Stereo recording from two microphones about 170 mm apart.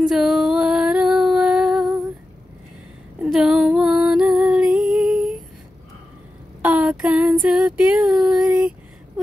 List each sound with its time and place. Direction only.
0.0 s female singing: centre (ahead or behind)
3.2 s music: 5° right (ahead or behind)
6.6 s female singing: 5° right (ahead or behind)